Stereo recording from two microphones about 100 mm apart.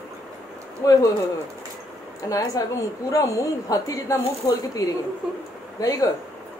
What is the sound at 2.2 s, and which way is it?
A woman's voice, 35° left (ahead or behind).